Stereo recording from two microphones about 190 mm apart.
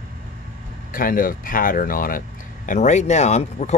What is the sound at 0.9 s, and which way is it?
Speech, 45° left (ahead or behind).